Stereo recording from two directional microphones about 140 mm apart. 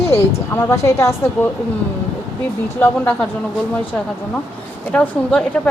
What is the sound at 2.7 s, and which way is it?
Speech, 10° left (ahead or behind).